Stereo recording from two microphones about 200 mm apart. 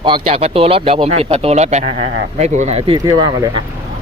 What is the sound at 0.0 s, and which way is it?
Speech, 25° right (ahead or behind).